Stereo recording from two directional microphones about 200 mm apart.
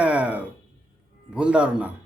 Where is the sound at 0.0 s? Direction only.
5° right (ahead or behind).